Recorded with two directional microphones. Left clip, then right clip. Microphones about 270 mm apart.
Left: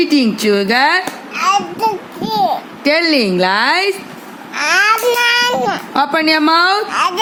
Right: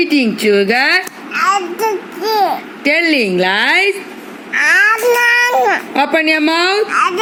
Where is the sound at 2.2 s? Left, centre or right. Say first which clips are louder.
Right 2 dB; centre.